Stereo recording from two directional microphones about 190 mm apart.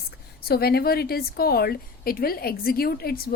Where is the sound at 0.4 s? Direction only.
55° left (ahead or behind).